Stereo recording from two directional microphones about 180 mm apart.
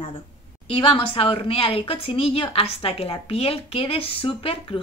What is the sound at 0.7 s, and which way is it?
A woman's voice, 30° left (ahead or behind).